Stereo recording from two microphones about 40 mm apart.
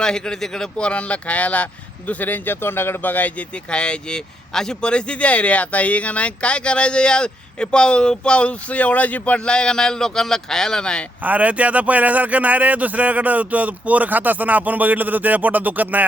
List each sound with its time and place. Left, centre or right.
0.0 s a man's voice: centre
0.9 s speech: left
3.7 s speech: left
9.5 s a man's voice: left
11.2 s a man's voice: right